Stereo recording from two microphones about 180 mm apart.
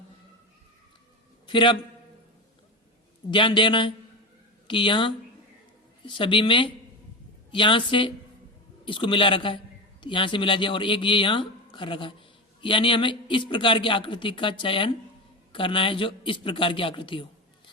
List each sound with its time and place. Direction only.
1.5 s a man's voice: 25° left (ahead or behind)
3.2 s speech: 25° left (ahead or behind)